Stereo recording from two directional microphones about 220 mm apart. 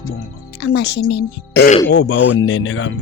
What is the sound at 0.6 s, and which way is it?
Speech, 55° left (ahead or behind).